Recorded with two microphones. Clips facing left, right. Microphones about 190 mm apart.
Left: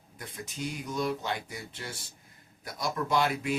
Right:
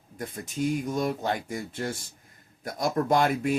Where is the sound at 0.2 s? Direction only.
50° right (ahead or behind).